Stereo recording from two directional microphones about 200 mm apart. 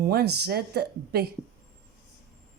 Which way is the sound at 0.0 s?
55° right (ahead or behind).